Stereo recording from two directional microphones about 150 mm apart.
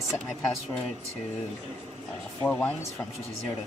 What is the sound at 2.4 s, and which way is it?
Speech, 10° left (ahead or behind).